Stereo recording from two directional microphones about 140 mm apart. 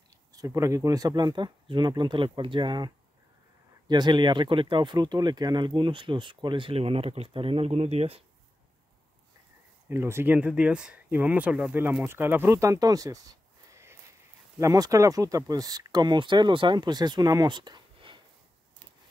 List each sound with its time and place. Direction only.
0.1 s a sound: 25° right (ahead or behind)
0.6 s speech: 25° right (ahead or behind); by 8.2 s 50° right (ahead or behind)
9.8 s speech: 20° right (ahead or behind); by 18.2 s 35° right (ahead or behind)